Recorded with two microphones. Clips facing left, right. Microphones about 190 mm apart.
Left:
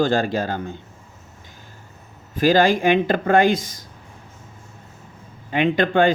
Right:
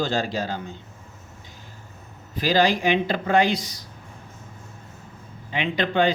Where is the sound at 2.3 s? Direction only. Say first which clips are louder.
Left 4 dB; 50° left (ahead or behind).